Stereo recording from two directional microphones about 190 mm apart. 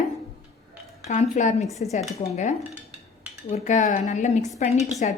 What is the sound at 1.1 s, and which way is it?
Speech, 40° left (ahead or behind).